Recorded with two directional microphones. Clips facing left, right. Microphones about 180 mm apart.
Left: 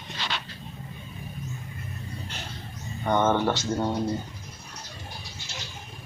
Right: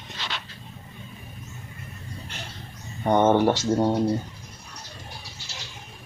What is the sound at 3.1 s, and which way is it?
Speech, 30° right (ahead or behind).